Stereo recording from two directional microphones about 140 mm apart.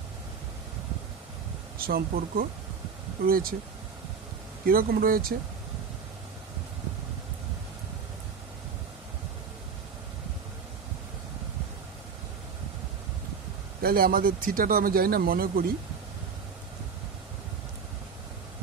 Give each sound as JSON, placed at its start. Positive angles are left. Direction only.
{"t": 1.8, "sound": "speech", "side_deg": -90}
{"t": 4.6, "sound": "speech", "side_deg": -90}
{"t": 13.8, "sound": "speech", "side_deg": -90}